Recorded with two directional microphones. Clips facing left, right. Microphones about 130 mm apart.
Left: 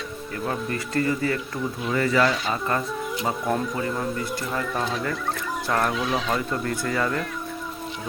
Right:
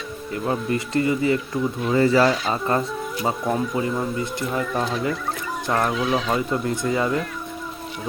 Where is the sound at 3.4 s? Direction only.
5° right (ahead or behind).